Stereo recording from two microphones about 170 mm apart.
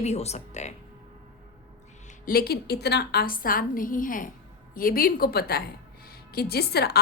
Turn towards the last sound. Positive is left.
turn(degrees=70)  # may be behind; listen again after turning